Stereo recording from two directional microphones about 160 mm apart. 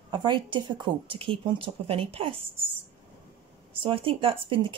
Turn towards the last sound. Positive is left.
turn(degrees=-35)  # may be behind; listen again after turning